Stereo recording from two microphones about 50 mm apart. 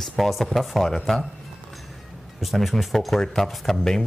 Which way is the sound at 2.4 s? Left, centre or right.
Centre.